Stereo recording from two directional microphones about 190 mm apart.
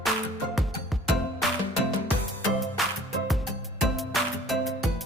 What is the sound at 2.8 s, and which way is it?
Music, centre (ahead or behind).